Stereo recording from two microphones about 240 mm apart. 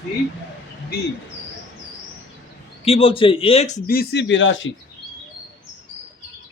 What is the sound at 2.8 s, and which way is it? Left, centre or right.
A man's voice, left.